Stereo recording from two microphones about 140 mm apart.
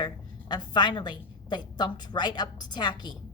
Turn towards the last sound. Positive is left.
turn(degrees=30)  # may be behind; listen again after turning